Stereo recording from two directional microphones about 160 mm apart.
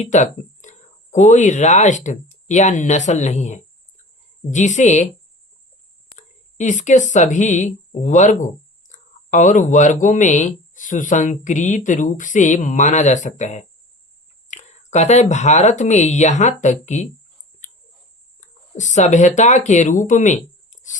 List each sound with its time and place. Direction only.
0.0 s speech: 50° left (ahead or behind)
6.1 s speech: 50° left (ahead or behind)
18.3 s speech: 50° left (ahead or behind)
20.0 s a sound: 50° left (ahead or behind)